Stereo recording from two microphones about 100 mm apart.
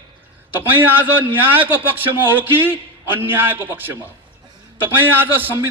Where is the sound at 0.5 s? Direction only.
20° right (ahead or behind).